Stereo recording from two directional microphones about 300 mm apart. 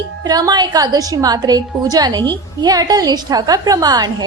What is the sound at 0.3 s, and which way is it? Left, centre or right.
A woman's voice, centre.